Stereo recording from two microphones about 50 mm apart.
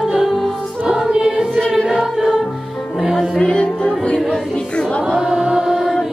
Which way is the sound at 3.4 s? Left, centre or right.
Left.